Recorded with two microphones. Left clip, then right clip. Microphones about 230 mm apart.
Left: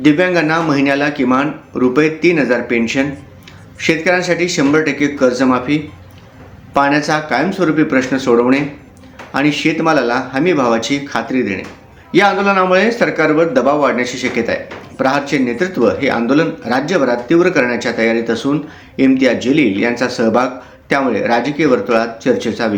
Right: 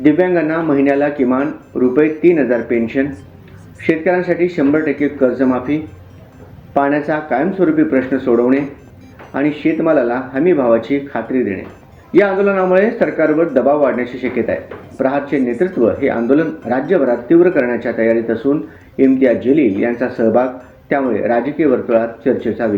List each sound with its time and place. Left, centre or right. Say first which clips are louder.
0.0 s speech: left 1 dB; centre
6.7 s speech: left 2 dB; centre